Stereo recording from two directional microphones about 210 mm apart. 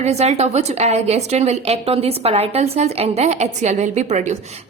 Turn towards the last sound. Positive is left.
turn(degrees=-35)  # may be behind; listen again after turning